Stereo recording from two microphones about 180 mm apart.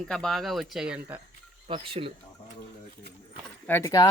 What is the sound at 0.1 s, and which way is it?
Speech, centre (ahead or behind).